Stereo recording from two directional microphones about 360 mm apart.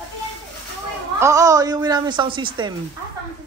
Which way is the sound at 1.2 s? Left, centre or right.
Centre.